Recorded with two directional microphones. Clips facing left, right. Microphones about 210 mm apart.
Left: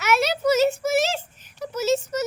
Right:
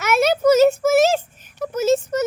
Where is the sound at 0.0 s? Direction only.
50° right (ahead or behind).